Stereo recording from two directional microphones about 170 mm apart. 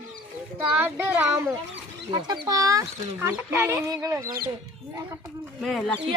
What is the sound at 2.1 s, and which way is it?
Speech, 25° right (ahead or behind).